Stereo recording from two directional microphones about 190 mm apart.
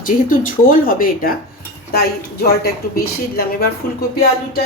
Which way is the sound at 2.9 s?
55° left (ahead or behind).